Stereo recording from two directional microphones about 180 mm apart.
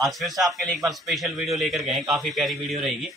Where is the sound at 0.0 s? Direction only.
Centre (ahead or behind).